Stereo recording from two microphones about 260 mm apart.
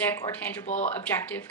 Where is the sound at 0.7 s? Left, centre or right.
Left.